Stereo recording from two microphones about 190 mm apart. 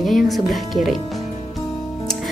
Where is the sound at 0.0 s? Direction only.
Centre (ahead or behind).